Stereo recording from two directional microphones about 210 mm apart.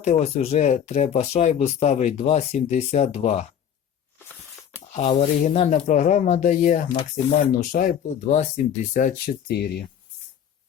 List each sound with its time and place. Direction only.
0.0 s speech: 35° left (ahead or behind)
4.9 s speech: 35° left (ahead or behind)
6.8 s speech: 25° left (ahead or behind)
7.3 s speech: 40° left (ahead or behind)